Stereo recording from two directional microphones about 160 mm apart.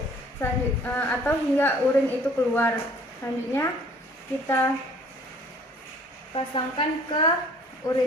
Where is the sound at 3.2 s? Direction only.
15° left (ahead or behind).